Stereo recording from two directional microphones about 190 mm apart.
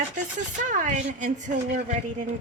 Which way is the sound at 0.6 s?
40° right (ahead or behind).